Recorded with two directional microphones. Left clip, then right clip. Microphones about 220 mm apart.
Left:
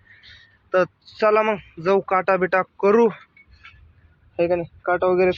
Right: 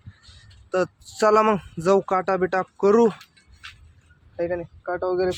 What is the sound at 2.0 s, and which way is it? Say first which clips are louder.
Speech: left 3 dB; 10° right (ahead or behind).